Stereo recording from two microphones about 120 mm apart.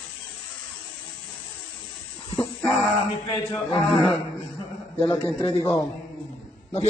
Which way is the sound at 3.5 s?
45° left (ahead or behind).